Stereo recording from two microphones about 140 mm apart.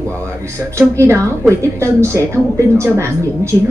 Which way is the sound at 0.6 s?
20° right (ahead or behind).